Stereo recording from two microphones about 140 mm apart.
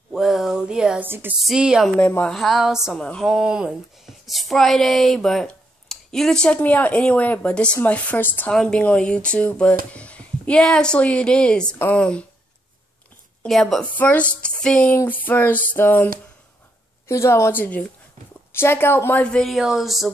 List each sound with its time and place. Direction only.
0.1 s a sound: centre (ahead or behind)
1.0 s speech: 15° right (ahead or behind)
1.4 s speech: 5° right (ahead or behind)
2.0 s speech: 10° left (ahead or behind)
2.3 s speech: centre (ahead or behind)
3.3 s speech: 5° right (ahead or behind)
13.4 s speech: centre (ahead or behind)
17.1 s speech: 20° left (ahead or behind); by 20.1 s centre (ahead or behind)